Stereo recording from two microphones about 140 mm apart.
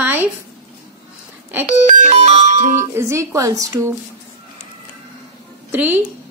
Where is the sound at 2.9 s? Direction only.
20° right (ahead or behind).